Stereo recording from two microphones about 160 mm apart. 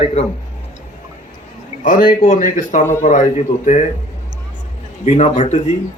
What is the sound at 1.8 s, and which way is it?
A man's voice, 55° left (ahead or behind).